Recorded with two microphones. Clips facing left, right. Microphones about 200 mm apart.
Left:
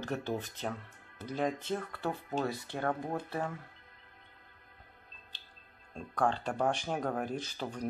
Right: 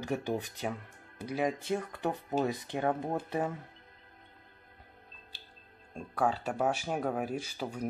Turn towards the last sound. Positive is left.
turn(degrees=-10)  # may be behind; listen again after turning